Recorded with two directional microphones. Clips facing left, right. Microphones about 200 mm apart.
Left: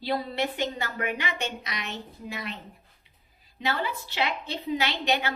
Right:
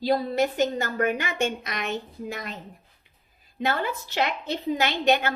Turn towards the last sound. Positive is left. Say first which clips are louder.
# right 5 dB
turn(degrees=-50)  # may be behind; listen again after turning